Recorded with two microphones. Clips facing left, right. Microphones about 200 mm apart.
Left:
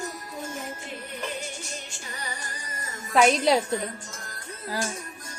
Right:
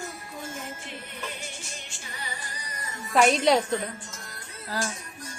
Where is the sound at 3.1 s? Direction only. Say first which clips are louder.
Even; centre (ahead or behind).